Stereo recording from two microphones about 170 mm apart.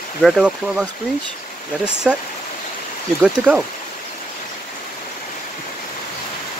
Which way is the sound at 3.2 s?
5° right (ahead or behind).